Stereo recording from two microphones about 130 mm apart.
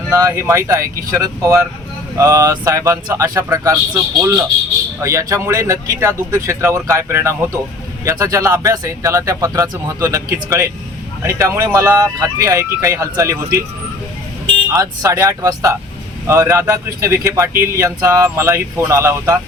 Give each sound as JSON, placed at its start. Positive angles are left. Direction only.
{"t": 0.1, "sound": "speech", "side_deg": -20}
{"t": 14.7, "sound": "speech", "side_deg": -25}